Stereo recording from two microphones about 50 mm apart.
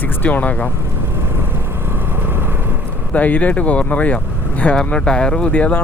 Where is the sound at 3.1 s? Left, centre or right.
Left.